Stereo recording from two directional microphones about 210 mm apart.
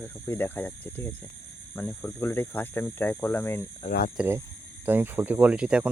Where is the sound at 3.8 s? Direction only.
40° left (ahead or behind).